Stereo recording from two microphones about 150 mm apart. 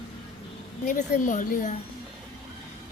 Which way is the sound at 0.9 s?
60° left (ahead or behind).